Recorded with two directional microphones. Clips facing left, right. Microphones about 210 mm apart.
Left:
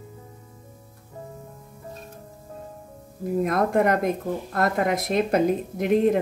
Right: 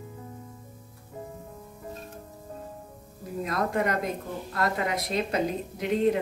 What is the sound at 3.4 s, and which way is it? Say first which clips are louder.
A woman's voice: left 5 dB; 50° left (ahead or behind).